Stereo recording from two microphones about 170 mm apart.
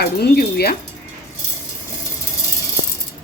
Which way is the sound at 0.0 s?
65° left (ahead or behind).